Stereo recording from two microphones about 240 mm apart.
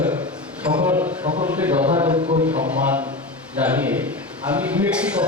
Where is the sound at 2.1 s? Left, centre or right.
Right.